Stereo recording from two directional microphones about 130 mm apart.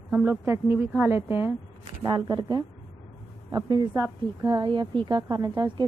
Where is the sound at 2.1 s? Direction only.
35° right (ahead or behind).